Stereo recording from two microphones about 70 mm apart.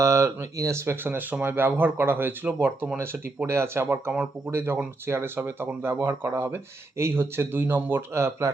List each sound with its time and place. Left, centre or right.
0.0 s speech: right
4.1 s speech: right
4.5 s speech: right